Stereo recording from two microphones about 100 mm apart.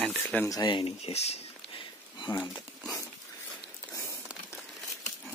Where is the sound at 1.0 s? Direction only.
90° left; by 2.3 s 60° left (ahead or behind).